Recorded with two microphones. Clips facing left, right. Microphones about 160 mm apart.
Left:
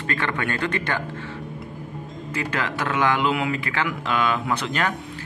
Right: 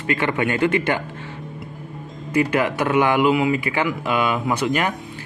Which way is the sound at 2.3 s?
15° right (ahead or behind).